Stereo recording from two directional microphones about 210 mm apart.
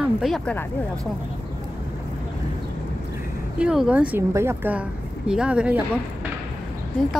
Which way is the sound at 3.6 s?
5° right (ahead or behind).